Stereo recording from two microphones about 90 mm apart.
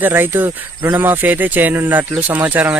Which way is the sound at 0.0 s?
20° right (ahead or behind).